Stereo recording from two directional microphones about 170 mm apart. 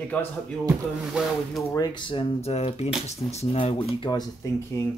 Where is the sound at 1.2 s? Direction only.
5° right (ahead or behind).